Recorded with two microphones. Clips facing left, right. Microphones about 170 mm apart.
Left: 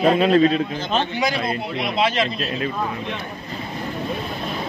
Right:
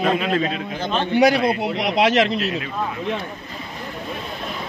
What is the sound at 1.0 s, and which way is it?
Speech, 60° right (ahead or behind).